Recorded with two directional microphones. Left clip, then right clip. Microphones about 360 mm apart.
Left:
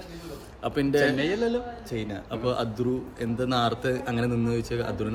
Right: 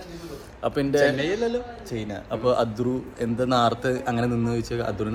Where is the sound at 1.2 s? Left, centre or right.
Centre.